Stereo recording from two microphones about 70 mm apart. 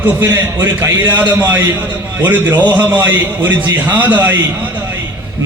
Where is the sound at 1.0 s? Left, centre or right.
Right.